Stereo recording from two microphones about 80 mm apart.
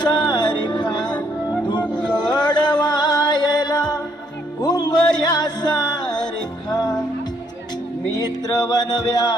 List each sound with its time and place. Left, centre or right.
0.0 s music: left
8.1 s music: left